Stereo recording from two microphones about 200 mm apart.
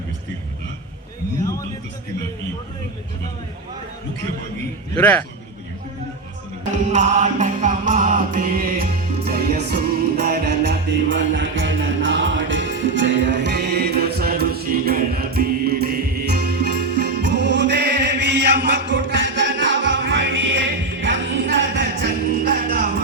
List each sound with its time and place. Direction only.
4.9 s speech: 10° left (ahead or behind)
6.9 s music: 35° right (ahead or behind); by 22.1 s 65° right (ahead or behind)
22.4 s music: 45° right (ahead or behind)